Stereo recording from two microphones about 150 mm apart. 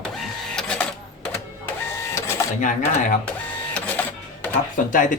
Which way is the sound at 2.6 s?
60° left (ahead or behind).